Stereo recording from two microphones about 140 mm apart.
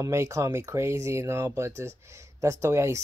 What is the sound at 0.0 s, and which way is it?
Speech, 20° right (ahead or behind).